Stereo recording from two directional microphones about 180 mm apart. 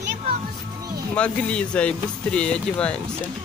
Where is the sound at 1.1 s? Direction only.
5° left (ahead or behind).